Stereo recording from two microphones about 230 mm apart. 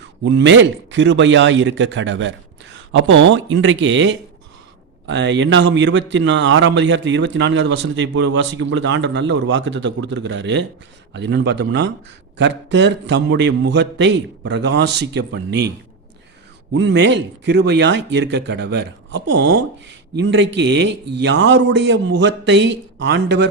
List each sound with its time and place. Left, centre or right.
0.0 s speech: right
16.7 s speech: right